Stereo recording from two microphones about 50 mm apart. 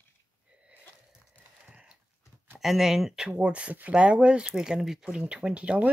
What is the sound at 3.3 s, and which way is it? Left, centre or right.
Speech, right.